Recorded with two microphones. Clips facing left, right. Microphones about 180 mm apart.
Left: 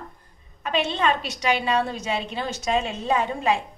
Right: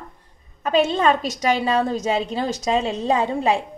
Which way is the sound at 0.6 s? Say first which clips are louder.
Right 6 dB; 40° right (ahead or behind).